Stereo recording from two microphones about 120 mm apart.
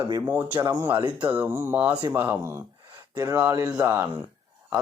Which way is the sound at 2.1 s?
15° right (ahead or behind).